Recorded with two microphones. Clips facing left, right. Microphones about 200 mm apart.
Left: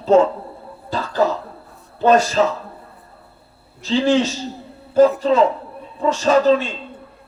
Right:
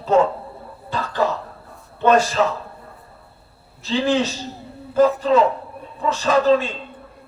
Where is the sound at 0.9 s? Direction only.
35° left (ahead or behind).